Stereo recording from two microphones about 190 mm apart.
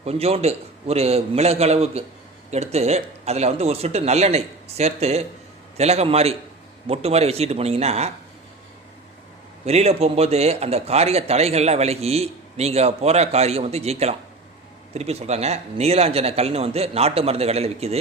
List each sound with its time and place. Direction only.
0.0 s a man's voice: 30° right (ahead or behind)
9.6 s a man's voice: 35° right (ahead or behind)